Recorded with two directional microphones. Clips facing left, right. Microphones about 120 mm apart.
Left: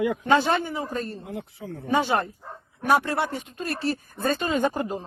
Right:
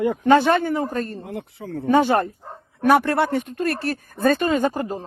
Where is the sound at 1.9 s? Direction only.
50° right (ahead or behind).